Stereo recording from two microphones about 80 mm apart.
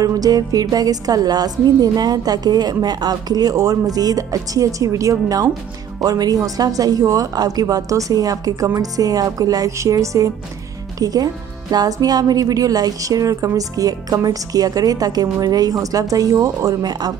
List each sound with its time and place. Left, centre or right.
0.0 s a woman's voice: right
9.7 s a woman's voice: right